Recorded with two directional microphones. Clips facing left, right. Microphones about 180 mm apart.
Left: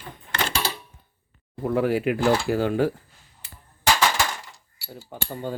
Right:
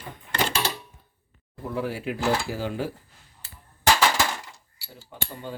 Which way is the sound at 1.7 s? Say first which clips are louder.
Left 7 dB; 65° left (ahead or behind).